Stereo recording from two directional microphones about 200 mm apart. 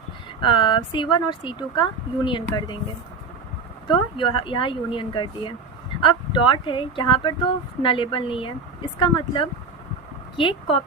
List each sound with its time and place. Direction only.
0.4 s speech: 25° left (ahead or behind)
4.2 s speech: 25° left (ahead or behind)